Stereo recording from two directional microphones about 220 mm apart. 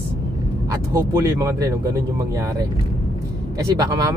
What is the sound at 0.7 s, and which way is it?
Speech, 15° right (ahead or behind).